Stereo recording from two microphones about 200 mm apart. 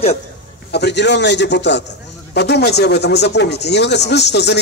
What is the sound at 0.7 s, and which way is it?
A man's voice, 55° left (ahead or behind).